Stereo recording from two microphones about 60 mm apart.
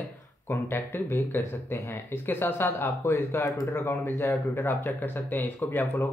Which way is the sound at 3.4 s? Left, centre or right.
Left.